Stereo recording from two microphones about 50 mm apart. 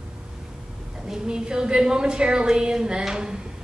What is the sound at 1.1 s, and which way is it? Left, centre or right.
A woman's voice, centre.